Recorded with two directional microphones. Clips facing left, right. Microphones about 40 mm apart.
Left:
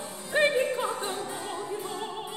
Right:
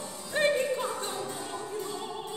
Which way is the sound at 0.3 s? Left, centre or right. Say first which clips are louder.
Left 2 dB; left.